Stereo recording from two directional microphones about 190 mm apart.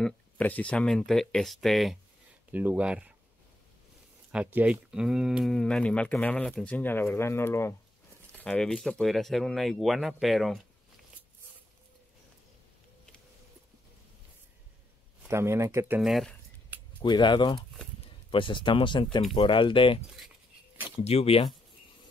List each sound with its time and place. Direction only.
0.0 s speech: 10° left (ahead or behind)
4.3 s speech: 5° right (ahead or behind)
15.2 s speech: 15° right (ahead or behind)
16.0 s speech: centre (ahead or behind)
17.0 s speech: 25° left (ahead or behind)
21.0 s speech: 30° left (ahead or behind)